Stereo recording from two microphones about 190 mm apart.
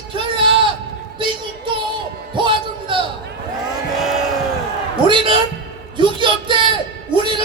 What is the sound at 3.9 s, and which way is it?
Vehicle, centre (ahead or behind).